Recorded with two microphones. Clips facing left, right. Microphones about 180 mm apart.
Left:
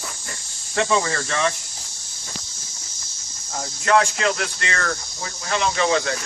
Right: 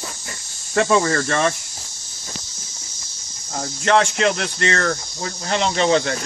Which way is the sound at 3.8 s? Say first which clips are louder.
Right 2 dB; 25° right (ahead or behind).